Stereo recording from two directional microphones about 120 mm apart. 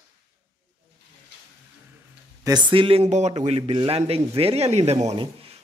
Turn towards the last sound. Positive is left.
turn(degrees=-60)  # may be behind; listen again after turning